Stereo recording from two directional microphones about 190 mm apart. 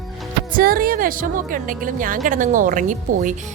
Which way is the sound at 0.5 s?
50° right (ahead or behind).